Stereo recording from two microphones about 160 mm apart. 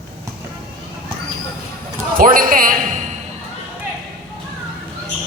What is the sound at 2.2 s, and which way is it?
Speech, 60° right (ahead or behind).